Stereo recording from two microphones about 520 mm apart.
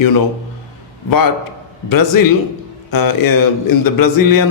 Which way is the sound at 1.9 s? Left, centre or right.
Left.